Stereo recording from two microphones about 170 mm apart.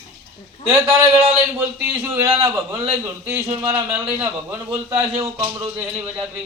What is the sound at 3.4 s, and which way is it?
Speech, 40° right (ahead or behind).